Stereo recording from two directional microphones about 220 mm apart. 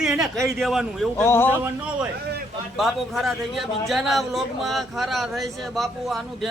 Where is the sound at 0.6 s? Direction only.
Centre (ahead or behind).